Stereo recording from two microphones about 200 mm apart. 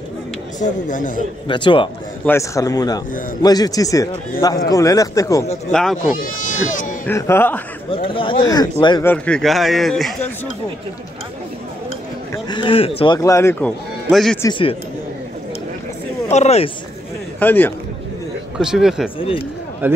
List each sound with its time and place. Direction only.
0.6 s speech: 40° left (ahead or behind)
1.5 s a man's voice: 25° left (ahead or behind)
5.7 s speech: 5° left (ahead or behind)
6.1 s speech: 40° left (ahead or behind)
7.1 s a man's voice: 10° left (ahead or behind)
7.9 s speech: 25° left (ahead or behind)
9.0 s speech: 5° left (ahead or behind)
12.4 s speech: 25° left (ahead or behind); by 14.4 s centre (ahead or behind)
14.4 s speech: 25° left (ahead or behind)
16.3 s speech: 35° left (ahead or behind)
17.4 s a man's voice: 10° left (ahead or behind)
18.6 s speech: 5° right (ahead or behind)
19.1 s speech: 30° left (ahead or behind)
19.8 s a man's voice: 10° right (ahead or behind)